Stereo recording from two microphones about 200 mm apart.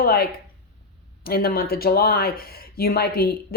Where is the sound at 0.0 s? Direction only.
50° left (ahead or behind).